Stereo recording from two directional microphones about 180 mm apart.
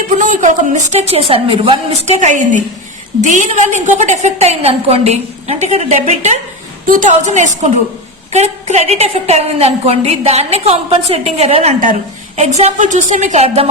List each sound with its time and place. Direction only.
0.2 s a woman's voice: 45° right (ahead or behind)